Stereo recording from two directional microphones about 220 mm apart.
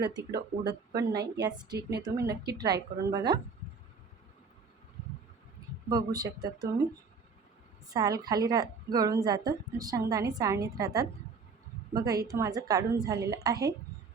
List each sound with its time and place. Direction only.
0.2 s speech: 50° right (ahead or behind)
0.7 s a woman's voice: 15° right (ahead or behind)
2.3 s speech: 45° right (ahead or behind)
3.1 s a woman's voice: 15° right (ahead or behind)
5.9 s a woman's voice: 15° right (ahead or behind)
7.9 s a woman's voice: 15° right (ahead or behind)